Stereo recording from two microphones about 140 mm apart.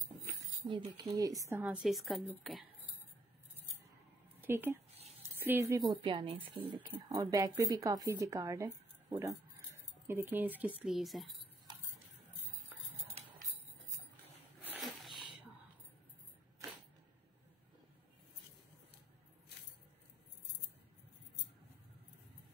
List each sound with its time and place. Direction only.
0.7 s speech: 30° right (ahead or behind)
1.6 s a woman's voice: 10° right (ahead or behind)
4.4 s speech: 15° right (ahead or behind)
5.9 s a woman's voice: 35° right (ahead or behind)
10.0 s speech: 15° right (ahead or behind)
14.8 s sniff: centre (ahead or behind)